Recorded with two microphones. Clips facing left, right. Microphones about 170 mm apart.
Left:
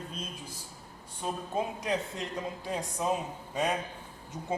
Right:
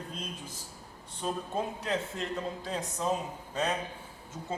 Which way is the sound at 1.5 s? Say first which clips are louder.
Left 3 dB; 15° left (ahead or behind).